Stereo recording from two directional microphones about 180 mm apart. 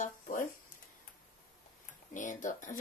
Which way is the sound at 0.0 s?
45° left (ahead or behind).